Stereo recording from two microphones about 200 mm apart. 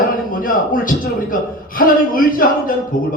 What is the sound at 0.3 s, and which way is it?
A man's voice, 45° left (ahead or behind).